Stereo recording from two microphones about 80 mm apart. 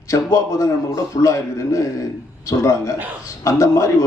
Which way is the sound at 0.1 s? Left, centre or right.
Left.